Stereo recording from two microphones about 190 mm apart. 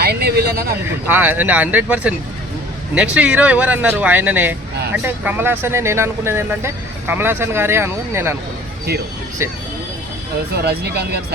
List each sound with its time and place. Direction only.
0.0 s speech: 55° right (ahead or behind)
0.9 s speech: 10° right (ahead or behind)
8.9 s speech: 55° right (ahead or behind)
9.4 s speech: 15° right (ahead or behind)
10.5 s speech: 55° right (ahead or behind)